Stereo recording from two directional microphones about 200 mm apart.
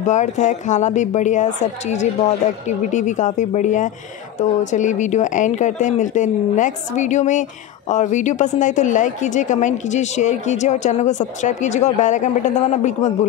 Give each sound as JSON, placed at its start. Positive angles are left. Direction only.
{"t": 0.0, "sound": "a woman's voice", "side_deg": 35}